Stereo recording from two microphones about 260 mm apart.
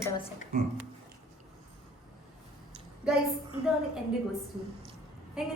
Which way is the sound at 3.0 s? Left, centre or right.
Centre.